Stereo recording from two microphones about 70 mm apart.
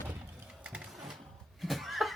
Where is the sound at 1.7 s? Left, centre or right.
Centre.